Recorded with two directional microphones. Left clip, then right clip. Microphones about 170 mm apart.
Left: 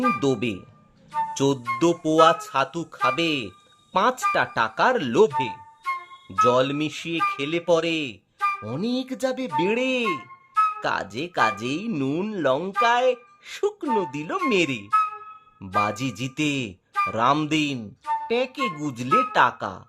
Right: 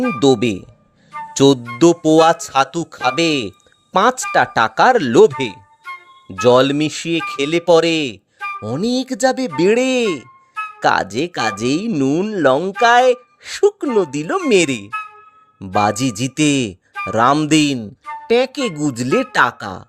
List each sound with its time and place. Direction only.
0.2 s speech: 35° right (ahead or behind)
1.3 s music: 40° right (ahead or behind)
1.8 s speech: 40° right (ahead or behind)
5.8 s music: 10° left (ahead or behind)
6.4 s speech: 45° right (ahead or behind)